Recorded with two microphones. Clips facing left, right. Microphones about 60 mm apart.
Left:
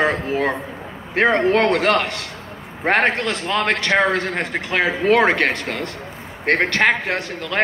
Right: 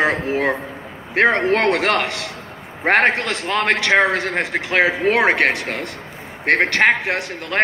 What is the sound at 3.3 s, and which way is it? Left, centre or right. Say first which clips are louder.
A man's voice: right 1 dB; right.